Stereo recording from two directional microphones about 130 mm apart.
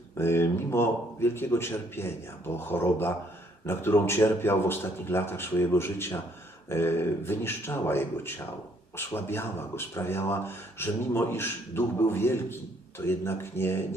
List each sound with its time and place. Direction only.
0.2 s speech: 20° left (ahead or behind)